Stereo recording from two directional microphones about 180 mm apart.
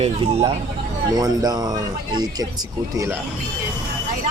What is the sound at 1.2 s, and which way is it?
Speech, 20° right (ahead or behind).